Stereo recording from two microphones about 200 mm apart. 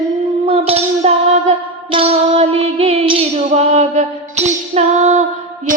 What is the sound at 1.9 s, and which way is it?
Music, 30° right (ahead or behind).